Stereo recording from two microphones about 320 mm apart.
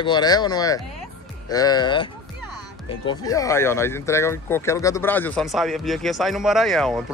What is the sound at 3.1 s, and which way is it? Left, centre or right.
Speech, centre.